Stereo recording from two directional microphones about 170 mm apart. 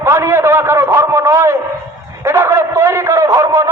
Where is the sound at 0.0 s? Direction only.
15° right (ahead or behind).